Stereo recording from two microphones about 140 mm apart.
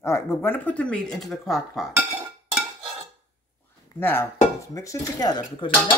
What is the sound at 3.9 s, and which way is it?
Speech, 15° left (ahead or behind).